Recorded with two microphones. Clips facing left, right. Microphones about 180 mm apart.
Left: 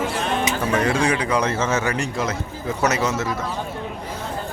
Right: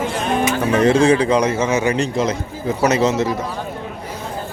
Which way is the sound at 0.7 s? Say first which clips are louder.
Right 8 dB; 25° right (ahead or behind).